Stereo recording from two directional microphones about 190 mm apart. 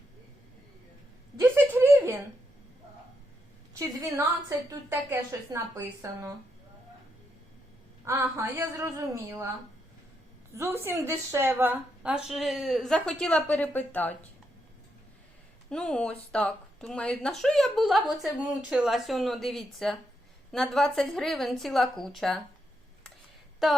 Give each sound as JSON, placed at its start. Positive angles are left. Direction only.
{"t": 1.4, "sound": "a sound", "side_deg": -10}
{"t": 4.4, "sound": "a woman's voice", "side_deg": -15}
{"t": 8.0, "sound": "a woman's voice", "side_deg": -15}
{"t": 10.6, "sound": "speech", "side_deg": -15}
{"t": 15.7, "sound": "speech", "side_deg": 5}